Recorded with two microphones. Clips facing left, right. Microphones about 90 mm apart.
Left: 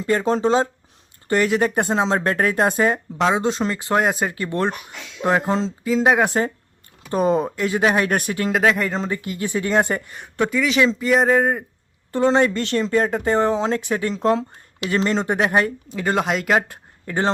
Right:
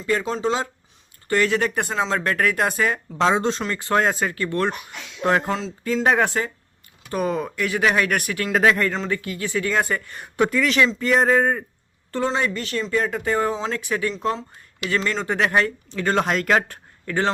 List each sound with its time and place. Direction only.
0.0 s speech: 40° left (ahead or behind)
1.3 s speech: 20° left (ahead or behind)
3.2 s speech: 5° left (ahead or behind)
3.6 s speech: 20° left (ahead or behind)
5.2 s speech: 10° left (ahead or behind)
7.1 s speech: 25° left (ahead or behind)
8.5 s speech: 5° left (ahead or behind)
8.9 s speech: 20° left (ahead or behind)
10.3 s speech: centre (ahead or behind)
12.3 s speech: 35° left (ahead or behind)
13.1 s speech: 25° left (ahead or behind)
13.7 s speech: 25° left (ahead or behind)
14.1 s speech: 40° left (ahead or behind)
14.8 s speech: 30° left (ahead or behind)